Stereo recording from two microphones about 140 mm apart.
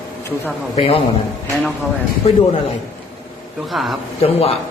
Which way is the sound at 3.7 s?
Centre (ahead or behind).